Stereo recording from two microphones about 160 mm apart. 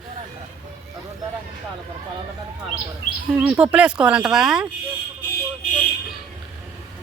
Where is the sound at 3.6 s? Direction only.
5° right (ahead or behind).